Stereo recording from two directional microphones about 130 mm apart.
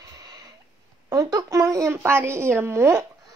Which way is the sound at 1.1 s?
25° right (ahead or behind).